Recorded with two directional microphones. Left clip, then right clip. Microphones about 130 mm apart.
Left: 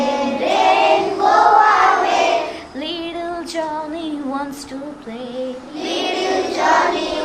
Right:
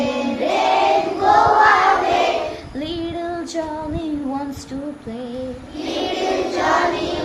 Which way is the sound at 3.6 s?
40° right (ahead or behind).